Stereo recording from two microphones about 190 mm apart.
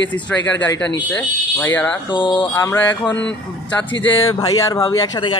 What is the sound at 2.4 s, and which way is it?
Speech, 10° left (ahead or behind).